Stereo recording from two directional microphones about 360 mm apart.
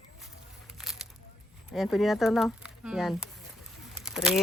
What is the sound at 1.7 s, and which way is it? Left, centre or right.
Speech, centre.